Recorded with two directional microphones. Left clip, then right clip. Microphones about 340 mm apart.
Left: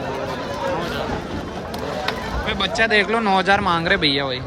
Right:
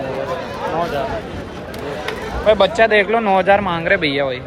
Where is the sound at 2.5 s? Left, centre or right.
Centre.